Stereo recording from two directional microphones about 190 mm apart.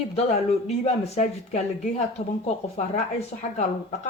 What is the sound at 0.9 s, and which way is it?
Speech, 35° left (ahead or behind).